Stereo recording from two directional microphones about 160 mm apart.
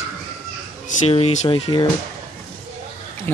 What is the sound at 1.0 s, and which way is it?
Speech, 40° left (ahead or behind).